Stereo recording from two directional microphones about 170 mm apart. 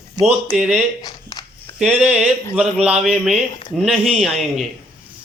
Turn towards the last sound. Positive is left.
turn(degrees=0)  # may be behind; listen again after turning